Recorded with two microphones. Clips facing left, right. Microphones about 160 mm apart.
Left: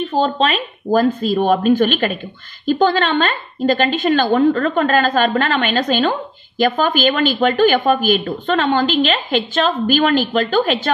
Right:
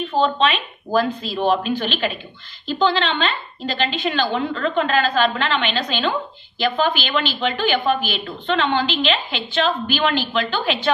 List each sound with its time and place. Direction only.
0.1 s speech: 40° left (ahead or behind)